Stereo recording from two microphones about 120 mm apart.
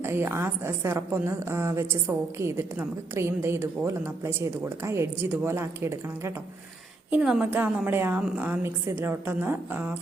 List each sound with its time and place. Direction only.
0.0 s a woman's voice: 20° right (ahead or behind)
7.1 s a woman's voice: 5° right (ahead or behind)